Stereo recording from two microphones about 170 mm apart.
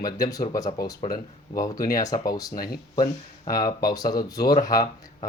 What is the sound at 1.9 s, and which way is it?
Speech, 20° left (ahead or behind).